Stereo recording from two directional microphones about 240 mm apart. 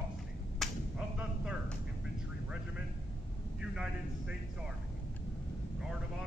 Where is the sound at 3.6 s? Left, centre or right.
Centre.